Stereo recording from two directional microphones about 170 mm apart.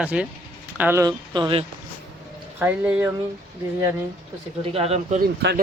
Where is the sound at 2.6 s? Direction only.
10° right (ahead or behind).